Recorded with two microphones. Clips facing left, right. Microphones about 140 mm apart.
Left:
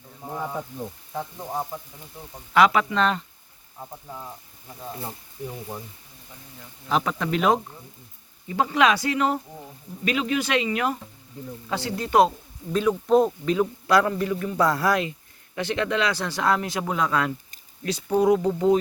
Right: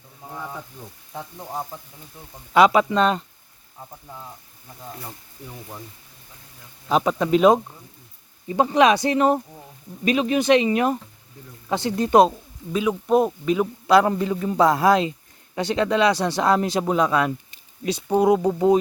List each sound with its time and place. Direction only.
2.5 s speech: 25° right (ahead or behind)
6.8 s speech: 20° right (ahead or behind)
12.7 s speech: 10° right (ahead or behind)
13.8 s speech: 25° right (ahead or behind)
16.8 s speech: 20° right (ahead or behind)